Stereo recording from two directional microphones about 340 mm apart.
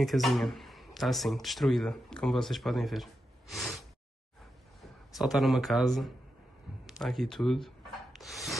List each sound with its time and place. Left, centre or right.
0.0 s speech: centre
4.8 s speech: centre
6.9 s rub: centre